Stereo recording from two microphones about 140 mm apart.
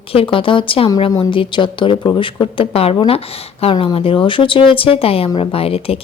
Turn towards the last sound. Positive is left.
turn(degrees=45)  # may be behind; listen again after turning